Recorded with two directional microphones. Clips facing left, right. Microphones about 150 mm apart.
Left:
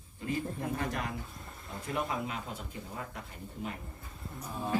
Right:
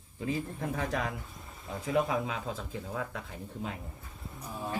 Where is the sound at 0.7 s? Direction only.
90° right.